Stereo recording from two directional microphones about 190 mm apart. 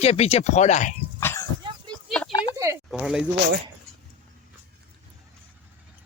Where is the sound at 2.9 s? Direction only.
5° right (ahead or behind).